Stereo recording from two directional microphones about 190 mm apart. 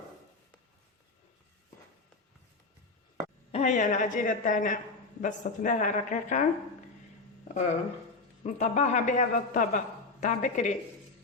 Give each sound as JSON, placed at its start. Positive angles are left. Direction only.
{"t": 3.5, "sound": "a woman's voice", "side_deg": 40}
{"t": 7.4, "sound": "a sound", "side_deg": 40}
{"t": 8.4, "sound": "a woman's voice", "side_deg": 40}